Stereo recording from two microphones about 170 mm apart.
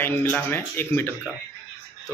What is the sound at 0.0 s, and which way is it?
Speech, 10° left (ahead or behind).